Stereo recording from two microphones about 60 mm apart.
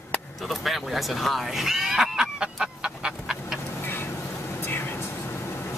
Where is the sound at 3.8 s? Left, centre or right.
Left.